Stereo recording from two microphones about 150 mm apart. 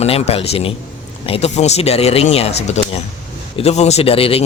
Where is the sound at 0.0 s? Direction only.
45° left (ahead or behind).